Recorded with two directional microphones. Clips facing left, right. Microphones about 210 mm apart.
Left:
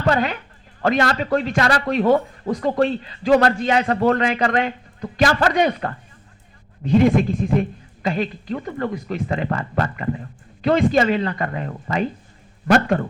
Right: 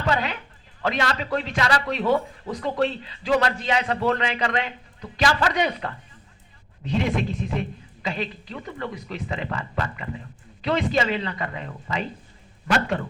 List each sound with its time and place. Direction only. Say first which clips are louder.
0.0 s a woman's voice: left 5 dB; 50° left (ahead or behind)